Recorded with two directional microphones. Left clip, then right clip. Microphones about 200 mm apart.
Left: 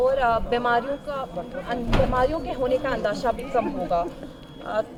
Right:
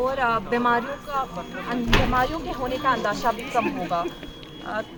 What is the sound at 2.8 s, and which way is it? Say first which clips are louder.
Speech: right 2 dB; 35° left (ahead or behind).